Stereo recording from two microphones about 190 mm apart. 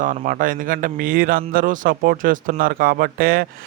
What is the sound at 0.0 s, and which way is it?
A man's voice, 45° right (ahead or behind).